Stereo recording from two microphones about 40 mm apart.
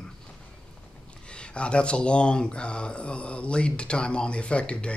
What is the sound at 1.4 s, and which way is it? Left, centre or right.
Speech, left.